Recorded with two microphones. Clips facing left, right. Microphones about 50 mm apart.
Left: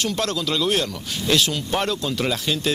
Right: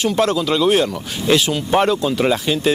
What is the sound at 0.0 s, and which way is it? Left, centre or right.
Speech, centre.